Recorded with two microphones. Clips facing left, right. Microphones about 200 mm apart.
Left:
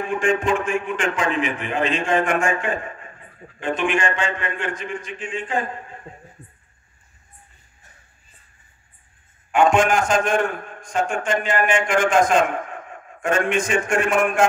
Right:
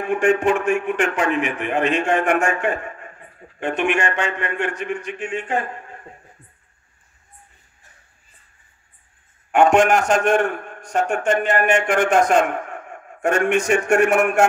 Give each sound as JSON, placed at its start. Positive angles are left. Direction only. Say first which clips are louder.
{"t": 0.0, "sound": "a man's voice", "louder": "right 3 dB", "side_deg": -65}
{"t": 3.5, "sound": "a man's voice", "louder": "right 1 dB", "side_deg": -65}
{"t": 9.5, "sound": "a man's voice", "louder": "right 2 dB", "side_deg": -65}